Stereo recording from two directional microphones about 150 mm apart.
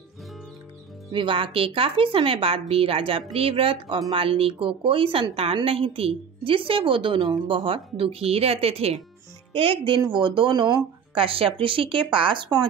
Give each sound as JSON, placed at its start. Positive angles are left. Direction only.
{"t": 1.1, "sound": "a woman's voice", "side_deg": -35}